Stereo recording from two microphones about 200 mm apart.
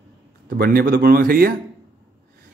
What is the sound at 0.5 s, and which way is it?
Speech, 50° right (ahead or behind).